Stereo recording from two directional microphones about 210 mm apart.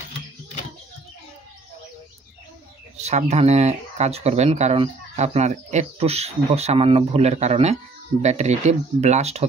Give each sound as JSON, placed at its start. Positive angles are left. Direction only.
{"t": 3.1, "sound": "speech", "side_deg": -30}